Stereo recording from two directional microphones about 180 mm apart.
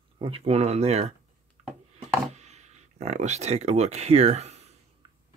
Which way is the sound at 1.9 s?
40° right (ahead or behind).